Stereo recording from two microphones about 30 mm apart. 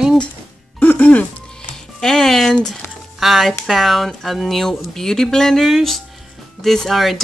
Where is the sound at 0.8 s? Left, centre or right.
Left.